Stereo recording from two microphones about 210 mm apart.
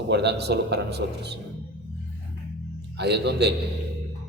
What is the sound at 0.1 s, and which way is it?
A man's voice, 55° right (ahead or behind).